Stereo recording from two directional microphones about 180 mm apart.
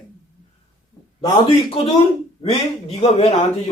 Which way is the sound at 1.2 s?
30° left (ahead or behind).